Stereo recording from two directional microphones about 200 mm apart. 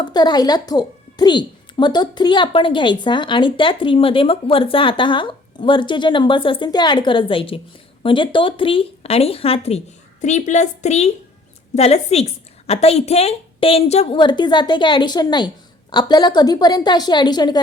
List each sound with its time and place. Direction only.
0.0 s a woman's voice: 20° left (ahead or behind)